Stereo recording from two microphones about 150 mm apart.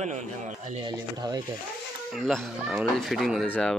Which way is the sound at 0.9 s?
25° right (ahead or behind).